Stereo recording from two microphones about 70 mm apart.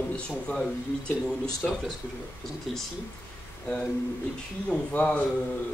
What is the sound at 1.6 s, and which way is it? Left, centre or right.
A man's voice, centre.